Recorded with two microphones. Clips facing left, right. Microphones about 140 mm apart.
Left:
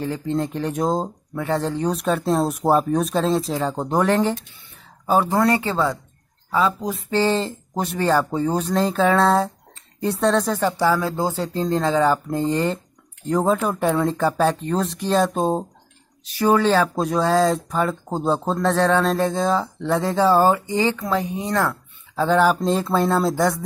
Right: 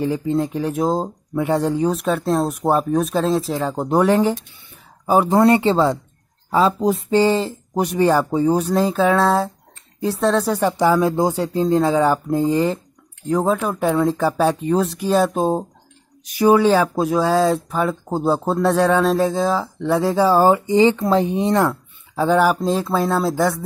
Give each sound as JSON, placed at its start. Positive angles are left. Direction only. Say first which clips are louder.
{"t": 0.0, "sound": "speech", "louder": "right 4 dB", "side_deg": -10}
{"t": 1.9, "sound": "speech", "louder": "right 1 dB", "side_deg": 0}
{"t": 7.1, "sound": "speech", "louder": "right 1 dB", "side_deg": -15}
{"t": 10.5, "sound": "speech", "louder": "right 3 dB", "side_deg": -15}